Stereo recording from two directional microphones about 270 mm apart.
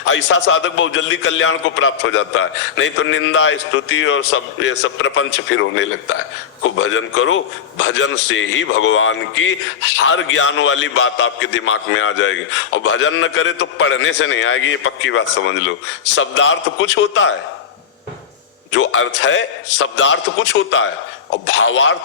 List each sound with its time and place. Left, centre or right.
0.1 s a man's voice: left
18.7 s a man's voice: left